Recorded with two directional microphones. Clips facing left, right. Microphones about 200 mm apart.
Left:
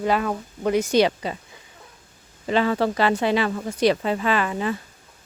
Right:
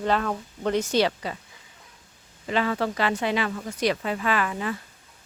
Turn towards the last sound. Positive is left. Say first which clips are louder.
# left 3 dB
turn(degrees=25)  # may be behind; listen again after turning